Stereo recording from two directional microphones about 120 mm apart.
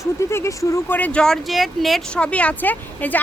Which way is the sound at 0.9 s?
10° left (ahead or behind).